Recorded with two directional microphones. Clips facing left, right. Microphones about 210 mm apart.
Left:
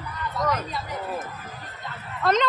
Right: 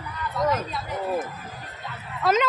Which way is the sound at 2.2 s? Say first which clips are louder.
Even; 5° right (ahead or behind).